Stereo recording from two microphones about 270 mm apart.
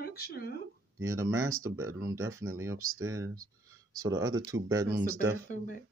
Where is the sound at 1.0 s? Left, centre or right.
Centre.